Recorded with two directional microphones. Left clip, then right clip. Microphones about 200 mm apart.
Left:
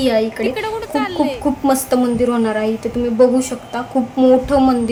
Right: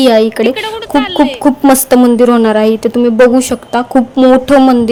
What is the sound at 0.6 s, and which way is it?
Speech, centre (ahead or behind).